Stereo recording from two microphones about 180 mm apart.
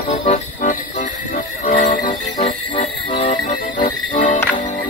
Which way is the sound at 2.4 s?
35° left (ahead or behind).